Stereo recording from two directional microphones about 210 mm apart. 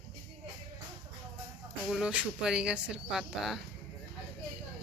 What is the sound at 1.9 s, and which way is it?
Speech, 5° right (ahead or behind).